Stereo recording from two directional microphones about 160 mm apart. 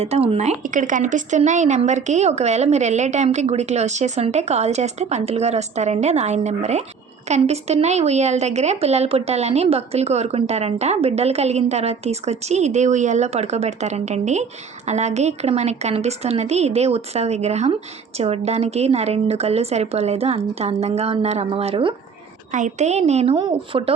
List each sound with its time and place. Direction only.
0.0 s a woman's voice: 40° right (ahead or behind)
22.5 s a woman's voice: 50° right (ahead or behind)